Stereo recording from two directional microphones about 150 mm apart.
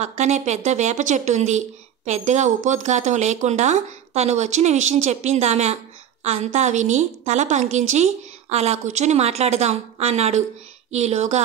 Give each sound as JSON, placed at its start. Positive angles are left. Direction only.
{"t": 0.0, "sound": "a woman's voice", "side_deg": -45}